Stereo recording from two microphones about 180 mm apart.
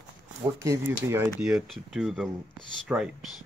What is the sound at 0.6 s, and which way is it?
Speech, 15° right (ahead or behind).